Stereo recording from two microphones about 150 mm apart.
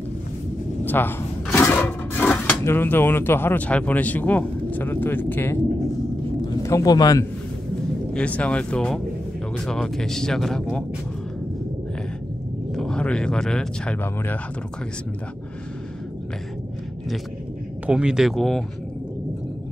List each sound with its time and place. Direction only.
0.8 s speech: 15° left (ahead or behind)
6.6 s speech: 20° left (ahead or behind)
8.1 s speech: 10° left (ahead or behind)
12.7 s speech: 5° left (ahead or behind)
17.8 s speech: 5° right (ahead or behind)